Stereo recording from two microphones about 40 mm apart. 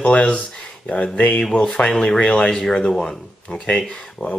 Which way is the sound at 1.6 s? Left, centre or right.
Left.